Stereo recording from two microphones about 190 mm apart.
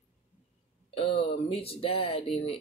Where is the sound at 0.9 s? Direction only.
30° left (ahead or behind).